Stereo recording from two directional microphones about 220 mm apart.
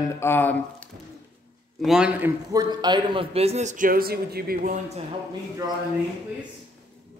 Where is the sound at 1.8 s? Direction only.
5° right (ahead or behind); by 4.8 s 40° right (ahead or behind).